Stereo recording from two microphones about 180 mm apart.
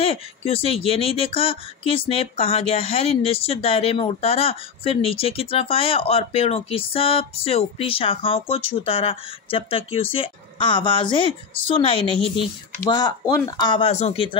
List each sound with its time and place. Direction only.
0.0 s a woman's voice: 30° left (ahead or behind)